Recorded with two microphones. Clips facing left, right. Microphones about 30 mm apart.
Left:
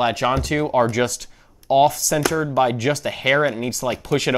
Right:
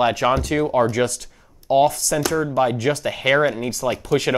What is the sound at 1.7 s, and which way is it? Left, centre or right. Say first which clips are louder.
Speech: left 1 dB; left.